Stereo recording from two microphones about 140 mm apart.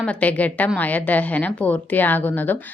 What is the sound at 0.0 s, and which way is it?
A woman's voice, 10° left (ahead or behind).